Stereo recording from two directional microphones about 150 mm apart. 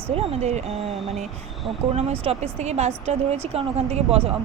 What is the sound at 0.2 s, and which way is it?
Speech, 45° right (ahead or behind).